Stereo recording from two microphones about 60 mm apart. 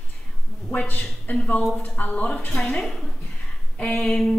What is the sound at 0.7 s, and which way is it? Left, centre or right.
A woman's voice, left.